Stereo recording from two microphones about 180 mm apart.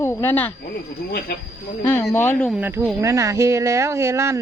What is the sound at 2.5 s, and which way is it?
Speech, 10° right (ahead or behind).